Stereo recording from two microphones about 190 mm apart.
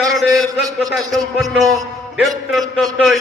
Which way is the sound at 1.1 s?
Centre (ahead or behind).